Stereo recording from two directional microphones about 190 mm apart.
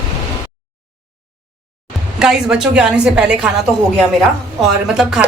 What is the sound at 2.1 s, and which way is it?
A woman's voice, 5° right (ahead or behind).